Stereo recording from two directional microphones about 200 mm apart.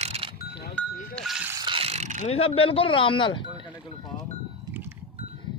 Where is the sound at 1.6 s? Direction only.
30° right (ahead or behind).